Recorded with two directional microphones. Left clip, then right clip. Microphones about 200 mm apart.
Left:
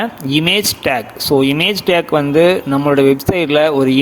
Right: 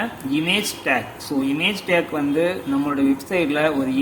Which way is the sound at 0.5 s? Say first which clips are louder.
Left 6 dB; 50° left (ahead or behind).